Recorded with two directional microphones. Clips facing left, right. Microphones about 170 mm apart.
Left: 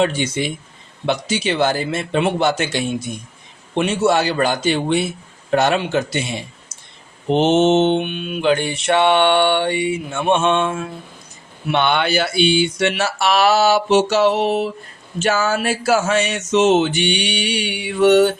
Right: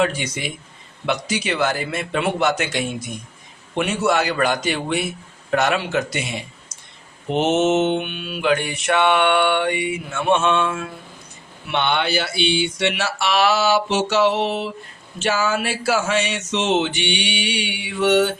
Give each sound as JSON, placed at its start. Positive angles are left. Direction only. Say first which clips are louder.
{"t": 0.0, "sound": "mantra", "louder": "left 3 dB", "side_deg": 25}
{"t": 5.5, "sound": "a man's voice", "louder": "left 3 dB", "side_deg": 30}
{"t": 5.8, "sound": "mantra", "louder": "left 3 dB", "side_deg": 30}
{"t": 7.3, "sound": "mantra", "louder": "left 4 dB", "side_deg": 30}
{"t": 11.7, "sound": "music", "louder": "left 3 dB", "side_deg": 50}